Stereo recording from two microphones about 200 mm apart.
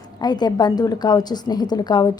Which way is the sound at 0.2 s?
20° left (ahead or behind).